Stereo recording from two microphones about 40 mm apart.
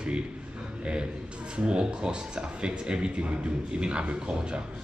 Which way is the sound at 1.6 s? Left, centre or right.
Right.